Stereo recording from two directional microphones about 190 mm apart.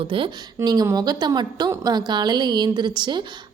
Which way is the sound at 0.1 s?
25° right (ahead or behind).